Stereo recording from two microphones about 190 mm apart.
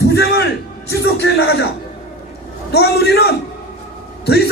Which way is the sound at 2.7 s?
60° left (ahead or behind).